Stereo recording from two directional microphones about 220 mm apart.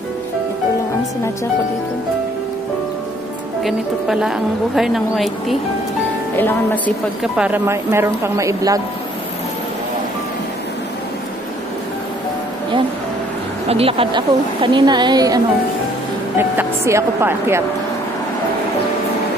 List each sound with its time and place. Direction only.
3.6 s a woman's voice: centre (ahead or behind)
7.3 s speech: 5° right (ahead or behind)
13.7 s a woman's voice: 25° right (ahead or behind)